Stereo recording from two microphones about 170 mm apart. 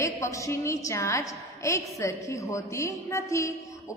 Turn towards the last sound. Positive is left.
turn(degrees=20)  # may be behind; listen again after turning